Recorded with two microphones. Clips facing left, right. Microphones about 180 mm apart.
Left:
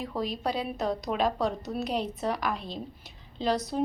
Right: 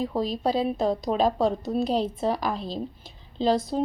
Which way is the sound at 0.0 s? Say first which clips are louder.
Right 5 dB; 30° right (ahead or behind).